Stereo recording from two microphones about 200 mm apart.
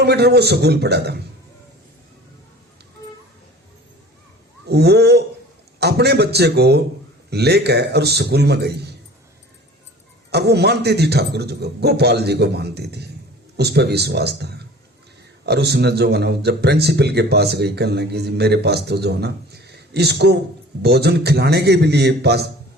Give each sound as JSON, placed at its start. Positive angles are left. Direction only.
{"t": 0.0, "sound": "speech", "side_deg": -55}
{"t": 4.6, "sound": "speech", "side_deg": -55}
{"t": 10.3, "sound": "speech", "side_deg": -55}